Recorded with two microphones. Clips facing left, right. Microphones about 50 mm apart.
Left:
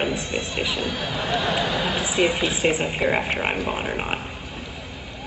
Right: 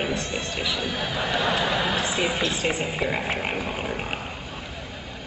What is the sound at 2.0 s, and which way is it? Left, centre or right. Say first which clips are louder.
Speech: left 3 dB; centre.